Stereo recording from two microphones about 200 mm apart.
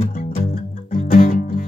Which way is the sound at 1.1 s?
40° left (ahead or behind).